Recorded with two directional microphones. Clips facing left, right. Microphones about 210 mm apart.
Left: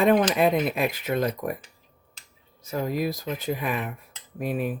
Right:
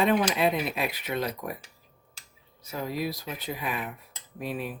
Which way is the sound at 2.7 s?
50° left (ahead or behind).